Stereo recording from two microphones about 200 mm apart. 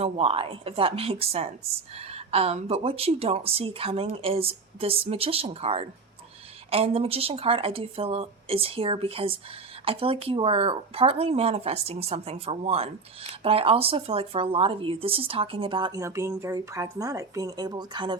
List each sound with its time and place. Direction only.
0.0 s speech: 30° right (ahead or behind)